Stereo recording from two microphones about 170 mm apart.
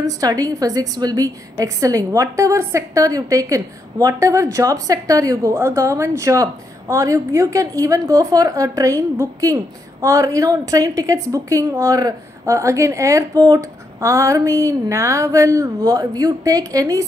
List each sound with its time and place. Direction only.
0.0 s a woman's voice: 20° right (ahead or behind)